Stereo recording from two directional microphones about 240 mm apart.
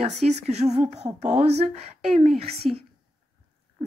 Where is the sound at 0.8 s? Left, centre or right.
Right.